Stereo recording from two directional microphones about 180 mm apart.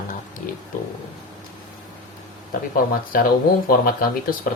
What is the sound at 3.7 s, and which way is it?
Speech, 55° left (ahead or behind).